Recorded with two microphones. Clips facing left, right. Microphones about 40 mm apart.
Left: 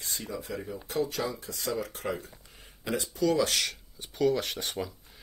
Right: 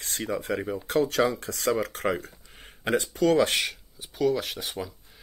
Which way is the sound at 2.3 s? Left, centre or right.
Right.